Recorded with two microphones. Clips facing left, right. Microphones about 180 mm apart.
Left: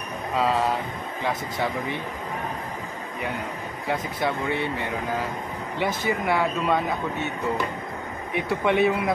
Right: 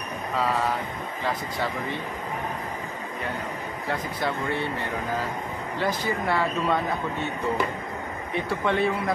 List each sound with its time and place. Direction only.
0.4 s speech: 20° left (ahead or behind)
5.8 s a man's voice: 15° left (ahead or behind)
8.4 s a man's voice: 15° left (ahead or behind)